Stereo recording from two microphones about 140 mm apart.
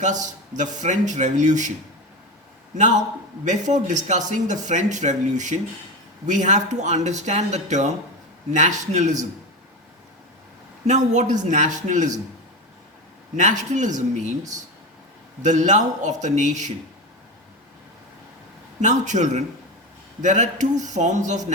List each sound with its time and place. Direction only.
0.0 s speech: 60° right (ahead or behind)
2.7 s speech: 60° right (ahead or behind)
10.8 s speech: 55° right (ahead or behind)
13.3 s speech: 60° right (ahead or behind)
15.4 s speech: 60° right (ahead or behind)
18.8 s speech: 60° right (ahead or behind)